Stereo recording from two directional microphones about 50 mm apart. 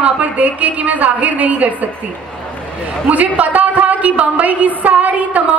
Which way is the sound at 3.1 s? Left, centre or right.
Right.